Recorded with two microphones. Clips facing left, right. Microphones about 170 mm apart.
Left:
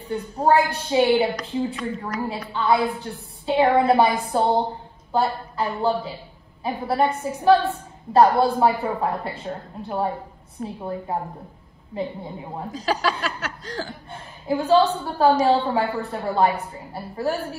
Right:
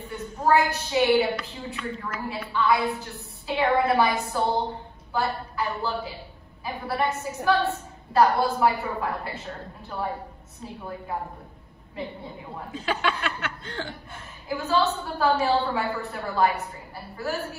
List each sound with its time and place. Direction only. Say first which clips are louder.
0.0 s a woman's voice: left 4 dB; 35° left (ahead or behind)
12.7 s speech: left 3 dB; 40° left (ahead or behind)